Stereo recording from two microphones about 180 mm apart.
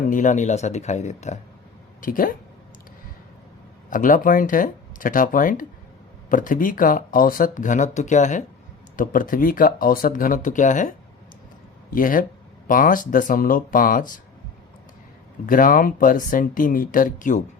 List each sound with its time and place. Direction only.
0.1 s speech: 45° left (ahead or behind)
3.8 s speech: 45° left (ahead or behind)
15.4 s speech: 50° left (ahead or behind)